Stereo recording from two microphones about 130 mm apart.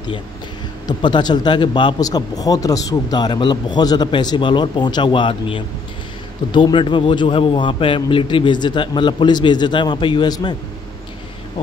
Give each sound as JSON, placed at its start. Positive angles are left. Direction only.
{"t": 0.8, "sound": "speech", "side_deg": 35}